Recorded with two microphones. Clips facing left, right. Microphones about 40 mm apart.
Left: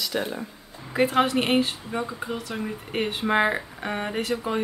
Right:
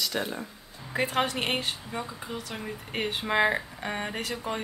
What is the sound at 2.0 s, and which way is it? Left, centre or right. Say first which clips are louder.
Speech: left 6 dB; centre.